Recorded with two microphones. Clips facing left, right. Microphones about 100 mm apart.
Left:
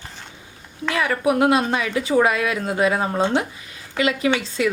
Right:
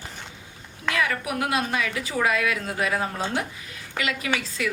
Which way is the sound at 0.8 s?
30° left (ahead or behind).